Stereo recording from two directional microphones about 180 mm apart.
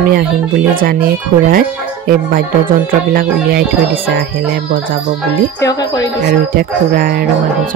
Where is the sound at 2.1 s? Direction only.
55° right (ahead or behind).